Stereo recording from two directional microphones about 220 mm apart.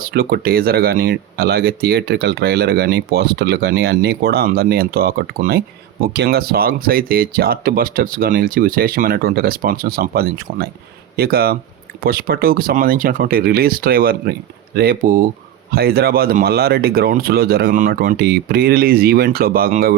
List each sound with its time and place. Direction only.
0.0 s speech: 45° right (ahead or behind)